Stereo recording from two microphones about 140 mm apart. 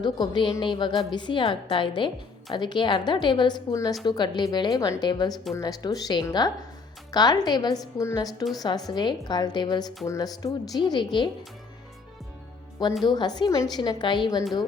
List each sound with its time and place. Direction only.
0.0 s a woman's voice: 35° left (ahead or behind)
12.9 s speech: centre (ahead or behind)
13.1 s a woman's voice: 30° left (ahead or behind)